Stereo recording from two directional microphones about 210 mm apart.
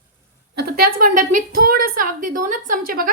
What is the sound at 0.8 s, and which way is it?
Speech, 45° right (ahead or behind).